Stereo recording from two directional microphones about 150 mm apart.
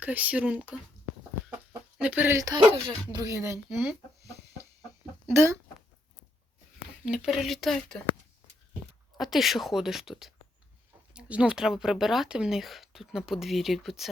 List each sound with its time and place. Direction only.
0.0 s speech: 10° right (ahead or behind)
1.5 s chicken: 10° right (ahead or behind)
3.1 s speech: 25° right (ahead or behind)
5.3 s speech: 20° right (ahead or behind)
7.0 s speech: 5° right (ahead or behind)
9.1 s speech: centre (ahead or behind)